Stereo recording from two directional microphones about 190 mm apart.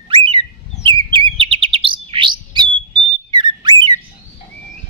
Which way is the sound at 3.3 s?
25° right (ahead or behind).